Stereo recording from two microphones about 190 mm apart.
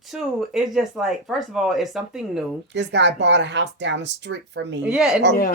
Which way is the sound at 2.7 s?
65° right (ahead or behind).